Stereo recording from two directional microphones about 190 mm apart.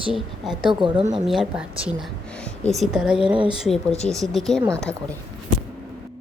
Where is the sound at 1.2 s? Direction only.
Centre (ahead or behind).